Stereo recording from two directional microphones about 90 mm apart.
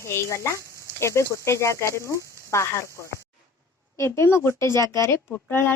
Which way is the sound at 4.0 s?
30° left (ahead or behind).